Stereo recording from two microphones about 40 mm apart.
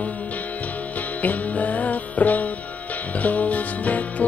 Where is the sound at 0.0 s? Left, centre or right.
Left.